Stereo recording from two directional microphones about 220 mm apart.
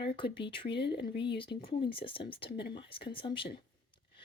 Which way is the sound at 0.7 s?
50° left (ahead or behind).